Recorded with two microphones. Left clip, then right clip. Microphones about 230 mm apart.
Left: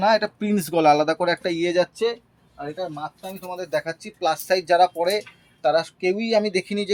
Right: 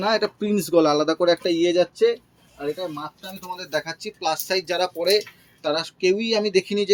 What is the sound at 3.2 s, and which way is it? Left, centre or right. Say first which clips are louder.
Speech: left 2 dB; left.